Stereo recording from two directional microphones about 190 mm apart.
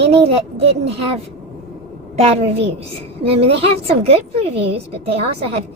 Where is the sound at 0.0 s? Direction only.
30° right (ahead or behind).